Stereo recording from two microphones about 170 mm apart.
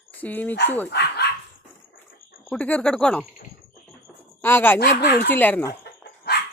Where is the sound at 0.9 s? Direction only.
75° left (ahead or behind).